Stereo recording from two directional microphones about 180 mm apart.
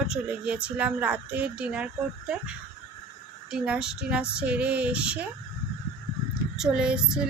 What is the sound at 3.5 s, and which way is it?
Speech, 5° right (ahead or behind).